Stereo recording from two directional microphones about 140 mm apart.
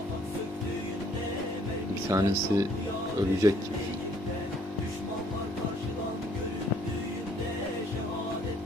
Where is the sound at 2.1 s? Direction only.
25° right (ahead or behind).